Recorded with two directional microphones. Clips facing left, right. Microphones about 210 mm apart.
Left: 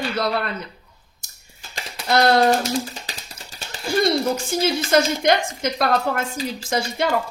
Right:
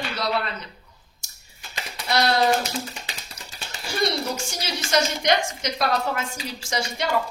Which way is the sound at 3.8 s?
55° left (ahead or behind).